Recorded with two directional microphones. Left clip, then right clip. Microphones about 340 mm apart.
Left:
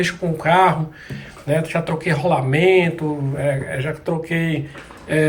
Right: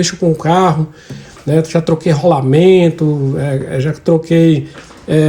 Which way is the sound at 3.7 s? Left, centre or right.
Centre.